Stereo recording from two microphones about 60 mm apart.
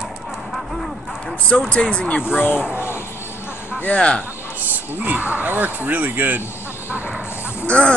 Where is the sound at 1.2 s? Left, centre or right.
Left.